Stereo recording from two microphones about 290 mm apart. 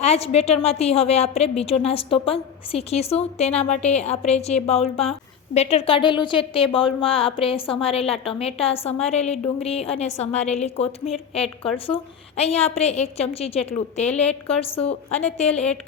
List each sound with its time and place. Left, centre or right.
0.0 s a woman's voice: left
12.4 s a woman's voice: left